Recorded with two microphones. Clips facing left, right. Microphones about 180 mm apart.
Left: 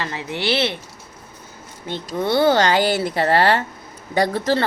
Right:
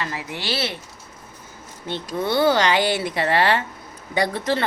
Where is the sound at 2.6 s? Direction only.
40° left (ahead or behind).